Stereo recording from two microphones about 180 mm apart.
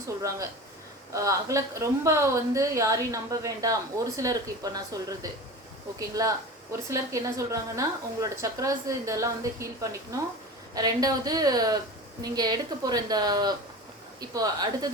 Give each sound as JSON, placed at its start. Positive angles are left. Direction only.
{"t": 1.1, "sound": "a woman's voice", "side_deg": -15}